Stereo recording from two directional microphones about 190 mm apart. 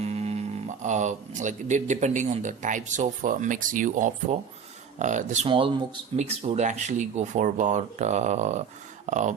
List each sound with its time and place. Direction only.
0.0 s speech: 35° right (ahead or behind)